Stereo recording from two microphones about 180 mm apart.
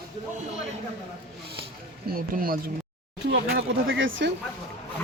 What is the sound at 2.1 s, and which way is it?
Speech, 50° right (ahead or behind).